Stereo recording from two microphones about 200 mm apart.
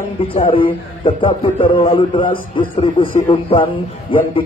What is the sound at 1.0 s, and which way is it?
A man's voice, 25° left (ahead or behind).